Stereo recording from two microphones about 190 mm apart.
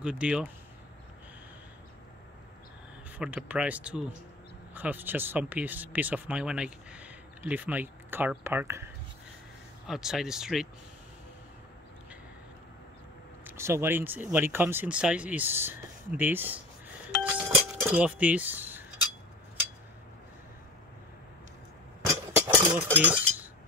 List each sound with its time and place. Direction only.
0.0 s speech: 5° right (ahead or behind)
3.1 s speech: 5° right (ahead or behind)
9.8 s speech: centre (ahead or behind)
13.4 s speech: 10° right (ahead or behind)
17.2 s chink: 5° right (ahead or behind)
22.0 s a sound: 15° right (ahead or behind)
22.9 s cutlery: 10° right (ahead or behind)